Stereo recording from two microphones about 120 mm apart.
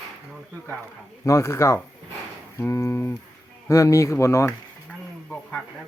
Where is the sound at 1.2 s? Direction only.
20° left (ahead or behind).